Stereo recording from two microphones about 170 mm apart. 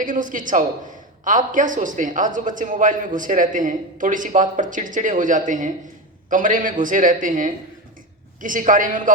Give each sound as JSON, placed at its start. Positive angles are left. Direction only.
{"t": 0.0, "sound": "speech", "side_deg": -50}